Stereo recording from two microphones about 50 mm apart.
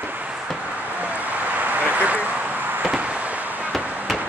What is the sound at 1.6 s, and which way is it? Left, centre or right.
Vehicle, right.